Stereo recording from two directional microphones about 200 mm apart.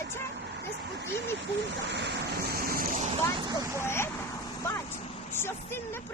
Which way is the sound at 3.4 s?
20° right (ahead or behind).